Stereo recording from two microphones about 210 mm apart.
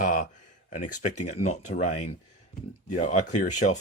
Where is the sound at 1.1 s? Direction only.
90° left.